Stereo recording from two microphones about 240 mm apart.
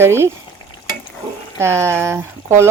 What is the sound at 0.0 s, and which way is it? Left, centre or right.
Speech, centre.